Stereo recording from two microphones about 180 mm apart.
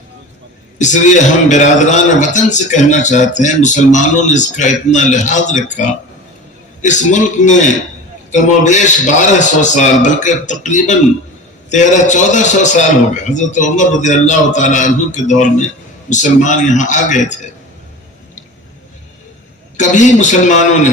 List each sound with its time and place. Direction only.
0.8 s a man's voice: 45° left (ahead or behind)
19.7 s a man's voice: 40° left (ahead or behind)